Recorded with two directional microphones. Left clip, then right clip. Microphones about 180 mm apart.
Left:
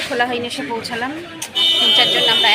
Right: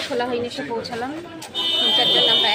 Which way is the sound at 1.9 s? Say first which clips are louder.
Left 3 dB; 5° left (ahead or behind).